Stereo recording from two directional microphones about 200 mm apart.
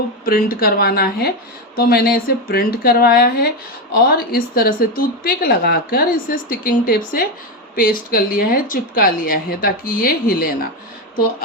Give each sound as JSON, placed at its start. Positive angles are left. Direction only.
{"t": 0.3, "sound": "speech", "side_deg": 45}